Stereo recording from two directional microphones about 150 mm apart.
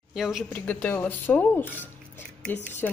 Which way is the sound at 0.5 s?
10° left (ahead or behind).